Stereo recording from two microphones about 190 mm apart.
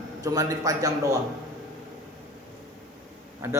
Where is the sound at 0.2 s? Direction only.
20° right (ahead or behind).